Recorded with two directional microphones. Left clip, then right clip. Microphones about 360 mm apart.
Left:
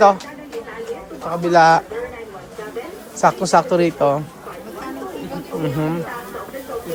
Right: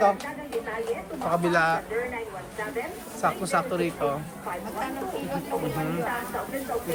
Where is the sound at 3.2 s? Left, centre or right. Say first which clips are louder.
Left 11 dB; centre.